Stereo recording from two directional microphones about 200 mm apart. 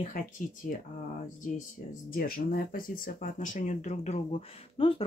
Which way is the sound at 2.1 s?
45° left (ahead or behind).